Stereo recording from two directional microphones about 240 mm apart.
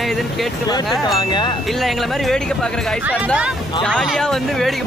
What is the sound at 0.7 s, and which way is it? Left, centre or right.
Speech, centre.